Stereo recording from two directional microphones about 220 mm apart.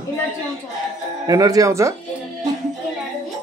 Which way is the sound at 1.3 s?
15° right (ahead or behind).